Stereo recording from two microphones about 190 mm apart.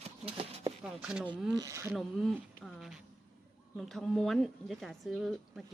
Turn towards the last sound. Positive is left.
turn(degrees=0)  # may be behind; listen again after turning